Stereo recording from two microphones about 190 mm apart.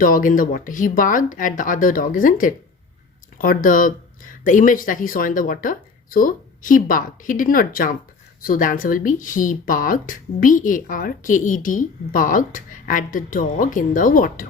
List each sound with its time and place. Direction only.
0.0 s speech: 45° left (ahead or behind)